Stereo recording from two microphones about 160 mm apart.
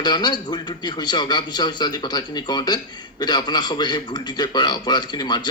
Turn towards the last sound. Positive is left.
turn(degrees=25)  # may be behind; listen again after turning